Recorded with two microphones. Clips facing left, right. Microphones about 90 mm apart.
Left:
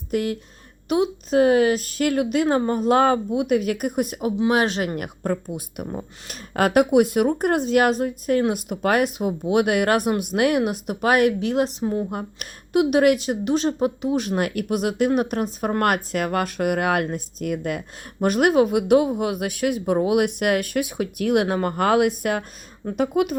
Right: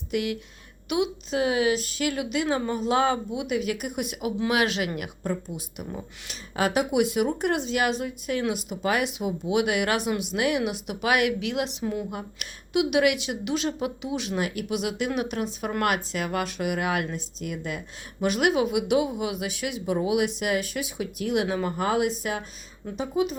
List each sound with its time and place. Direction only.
0.1 s speech: 40° left (ahead or behind); by 23.3 s 60° left (ahead or behind)